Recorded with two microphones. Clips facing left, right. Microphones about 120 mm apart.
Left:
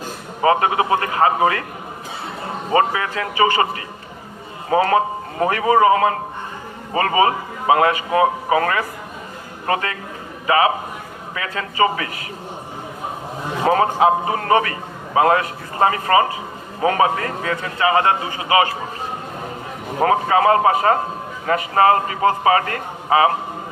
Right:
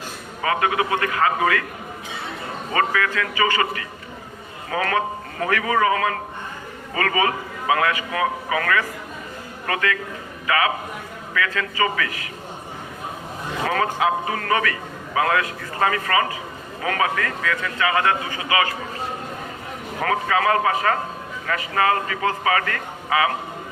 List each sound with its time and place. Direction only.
0.4 s a man's voice: 30° left (ahead or behind)
2.7 s a man's voice: 30° left (ahead or behind)
13.7 s a man's voice: 30° left (ahead or behind)
20.0 s a man's voice: 30° left (ahead or behind)